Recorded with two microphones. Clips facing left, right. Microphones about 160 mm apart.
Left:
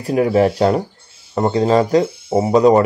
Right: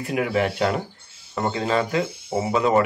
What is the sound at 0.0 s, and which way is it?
Speech, 35° left (ahead or behind).